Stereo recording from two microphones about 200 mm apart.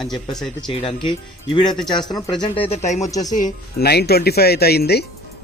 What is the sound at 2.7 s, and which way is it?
Speech, 35° left (ahead or behind).